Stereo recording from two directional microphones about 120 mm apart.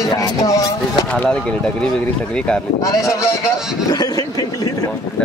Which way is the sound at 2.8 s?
30° left (ahead or behind).